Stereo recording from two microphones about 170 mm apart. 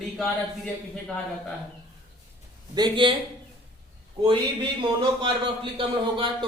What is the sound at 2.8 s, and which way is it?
Speech, 30° right (ahead or behind).